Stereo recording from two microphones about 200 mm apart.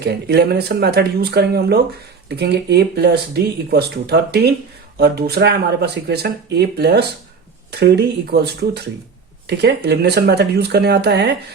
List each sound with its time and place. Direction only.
0.0 s speech: 55° right (ahead or behind)